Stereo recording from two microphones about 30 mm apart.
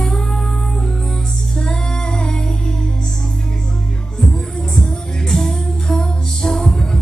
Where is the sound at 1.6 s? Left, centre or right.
Left.